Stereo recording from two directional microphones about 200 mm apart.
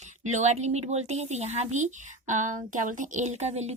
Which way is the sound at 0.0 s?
35° right (ahead or behind).